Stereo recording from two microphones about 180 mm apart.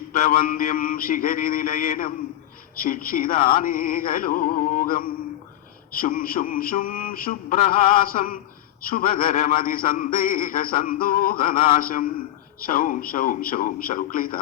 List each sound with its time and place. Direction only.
0.2 s mantra: 50° left (ahead or behind)